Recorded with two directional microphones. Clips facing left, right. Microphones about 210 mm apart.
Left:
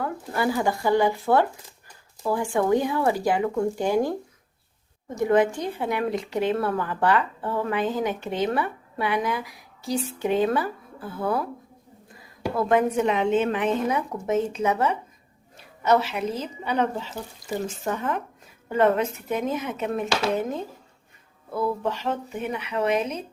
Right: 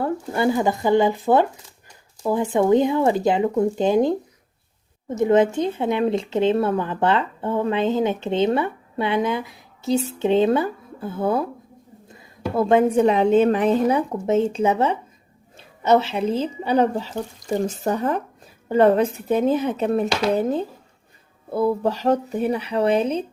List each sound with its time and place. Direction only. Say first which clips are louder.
0.0 s speech: right 5 dB; 25° right (ahead or behind)
12.5 s speech: right 5 dB; 25° right (ahead or behind)